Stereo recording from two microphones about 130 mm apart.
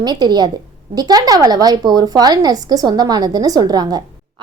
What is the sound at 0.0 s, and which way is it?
A woman's voice, 30° right (ahead or behind).